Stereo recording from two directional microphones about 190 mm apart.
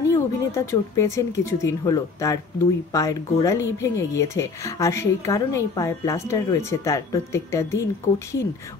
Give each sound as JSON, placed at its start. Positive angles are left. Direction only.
{"t": 0.1, "sound": "a woman's voice", "side_deg": 15}